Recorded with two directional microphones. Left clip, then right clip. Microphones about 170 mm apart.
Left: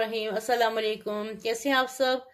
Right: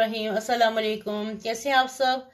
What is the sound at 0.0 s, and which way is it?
Speech, 30° left (ahead or behind).